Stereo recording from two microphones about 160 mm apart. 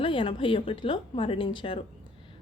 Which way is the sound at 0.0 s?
30° left (ahead or behind).